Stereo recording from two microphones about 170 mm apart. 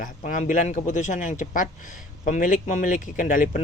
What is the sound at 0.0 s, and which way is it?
Speech, 50° left (ahead or behind).